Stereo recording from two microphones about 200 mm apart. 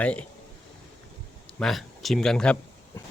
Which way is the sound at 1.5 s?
Centre (ahead or behind).